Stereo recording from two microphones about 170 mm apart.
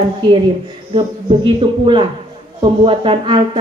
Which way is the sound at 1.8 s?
30° right (ahead or behind).